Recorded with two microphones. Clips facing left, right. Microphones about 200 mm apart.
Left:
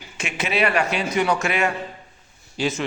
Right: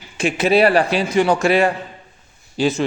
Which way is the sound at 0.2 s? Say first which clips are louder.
Right 9 dB; 35° right (ahead or behind).